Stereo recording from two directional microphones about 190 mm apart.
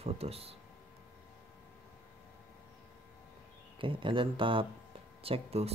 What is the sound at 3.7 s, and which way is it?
Speech, 25° right (ahead or behind).